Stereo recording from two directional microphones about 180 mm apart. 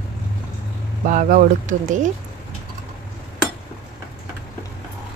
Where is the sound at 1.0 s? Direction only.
45° right (ahead or behind).